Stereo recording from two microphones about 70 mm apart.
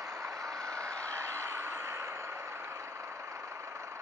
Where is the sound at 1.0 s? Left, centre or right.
Right.